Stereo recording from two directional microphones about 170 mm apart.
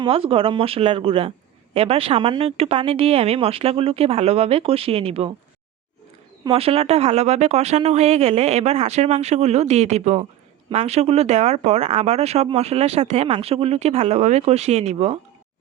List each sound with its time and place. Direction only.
0.0 s speech: 35° right (ahead or behind)
6.4 s speech: 35° right (ahead or behind)